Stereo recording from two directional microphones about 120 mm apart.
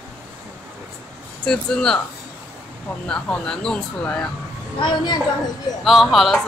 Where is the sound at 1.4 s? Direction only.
5° left (ahead or behind).